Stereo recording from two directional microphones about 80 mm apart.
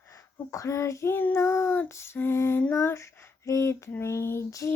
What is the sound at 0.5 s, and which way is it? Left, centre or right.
Speech, left.